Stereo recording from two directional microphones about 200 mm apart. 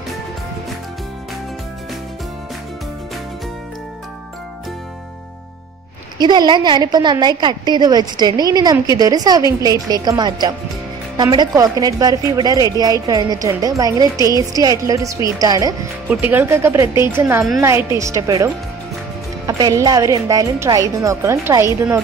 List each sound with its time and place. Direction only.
6.1 s a woman's voice: 20° right (ahead or behind)